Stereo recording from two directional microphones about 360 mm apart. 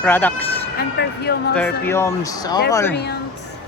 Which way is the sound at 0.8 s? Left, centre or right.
Left.